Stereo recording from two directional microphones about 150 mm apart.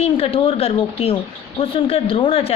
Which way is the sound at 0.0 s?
40° left (ahead or behind).